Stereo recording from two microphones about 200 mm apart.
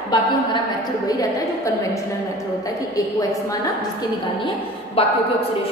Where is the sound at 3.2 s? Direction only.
15° left (ahead or behind).